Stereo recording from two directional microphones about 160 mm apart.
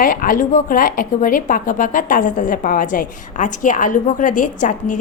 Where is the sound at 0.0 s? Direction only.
60° left (ahead or behind).